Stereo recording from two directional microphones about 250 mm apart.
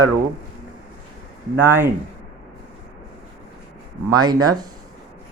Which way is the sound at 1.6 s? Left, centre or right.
Centre.